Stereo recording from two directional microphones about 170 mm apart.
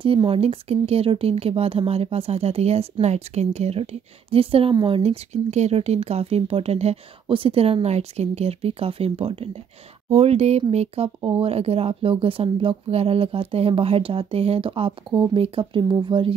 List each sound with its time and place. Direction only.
0.0 s speech: 30° right (ahead or behind)